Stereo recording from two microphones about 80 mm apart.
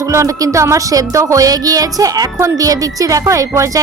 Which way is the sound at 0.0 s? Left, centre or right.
Right.